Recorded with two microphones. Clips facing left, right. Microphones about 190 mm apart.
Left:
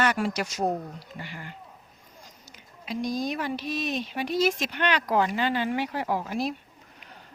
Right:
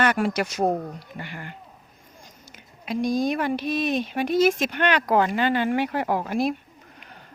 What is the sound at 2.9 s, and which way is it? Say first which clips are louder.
Speech: right 6 dB; 55° right (ahead or behind).